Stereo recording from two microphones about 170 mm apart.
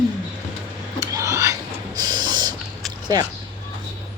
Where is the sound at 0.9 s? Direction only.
20° right (ahead or behind).